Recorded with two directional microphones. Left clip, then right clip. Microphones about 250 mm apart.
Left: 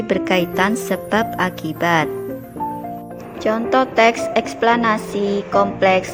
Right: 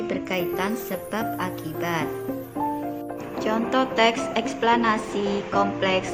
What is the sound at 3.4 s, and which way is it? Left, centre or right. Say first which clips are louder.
A woman's voice: left 7 dB; left.